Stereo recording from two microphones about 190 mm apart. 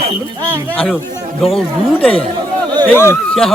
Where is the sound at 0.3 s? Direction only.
10° right (ahead or behind).